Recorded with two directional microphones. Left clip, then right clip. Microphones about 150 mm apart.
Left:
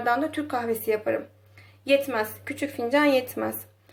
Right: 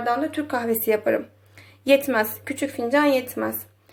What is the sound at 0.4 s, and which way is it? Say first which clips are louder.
Speech: right 3 dB; 15° right (ahead or behind).